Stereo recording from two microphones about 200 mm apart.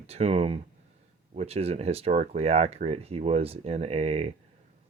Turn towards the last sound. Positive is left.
turn(degrees=-30)  # may be behind; listen again after turning